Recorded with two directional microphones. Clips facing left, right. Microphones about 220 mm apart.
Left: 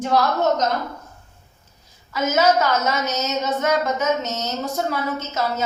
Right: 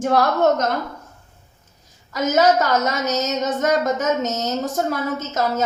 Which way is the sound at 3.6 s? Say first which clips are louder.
Right 2 dB; 45° right (ahead or behind).